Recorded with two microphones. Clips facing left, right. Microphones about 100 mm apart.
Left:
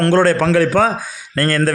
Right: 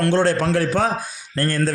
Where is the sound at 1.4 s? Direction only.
90° left.